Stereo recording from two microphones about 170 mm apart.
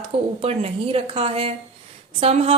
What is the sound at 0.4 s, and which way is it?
A woman's voice, 35° right (ahead or behind).